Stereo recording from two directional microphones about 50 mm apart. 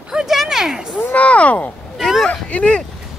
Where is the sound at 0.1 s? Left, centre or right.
Centre.